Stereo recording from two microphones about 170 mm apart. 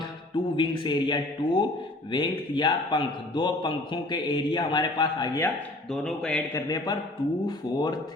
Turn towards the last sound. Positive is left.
turn(degrees=25)  # may be behind; listen again after turning